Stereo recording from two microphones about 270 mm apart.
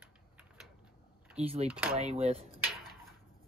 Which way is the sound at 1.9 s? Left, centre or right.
Right.